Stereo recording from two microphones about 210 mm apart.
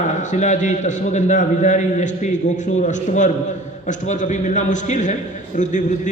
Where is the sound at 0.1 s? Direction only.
35° left (ahead or behind).